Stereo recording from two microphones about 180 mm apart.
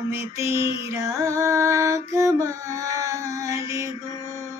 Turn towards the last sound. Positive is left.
turn(degrees=-15)  # may be behind; listen again after turning